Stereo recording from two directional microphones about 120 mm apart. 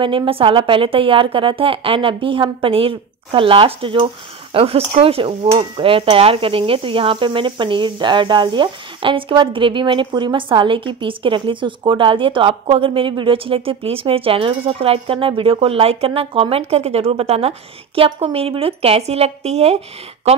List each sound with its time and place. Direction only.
0.0 s sizzle: 45° right (ahead or behind); by 19.8 s 65° right (ahead or behind)